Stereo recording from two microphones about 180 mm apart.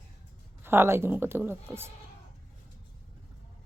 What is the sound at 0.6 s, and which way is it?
A woman's voice, 10° right (ahead or behind).